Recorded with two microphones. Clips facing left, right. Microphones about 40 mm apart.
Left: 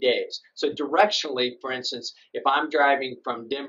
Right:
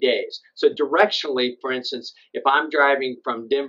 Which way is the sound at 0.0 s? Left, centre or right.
Centre.